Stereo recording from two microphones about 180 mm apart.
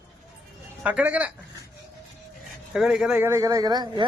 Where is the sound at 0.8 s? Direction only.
5° right (ahead or behind).